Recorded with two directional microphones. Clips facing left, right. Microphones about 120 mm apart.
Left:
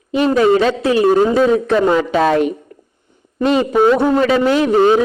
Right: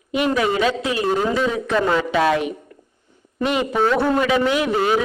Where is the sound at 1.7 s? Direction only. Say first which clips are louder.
Left 2 dB; 20° left (ahead or behind).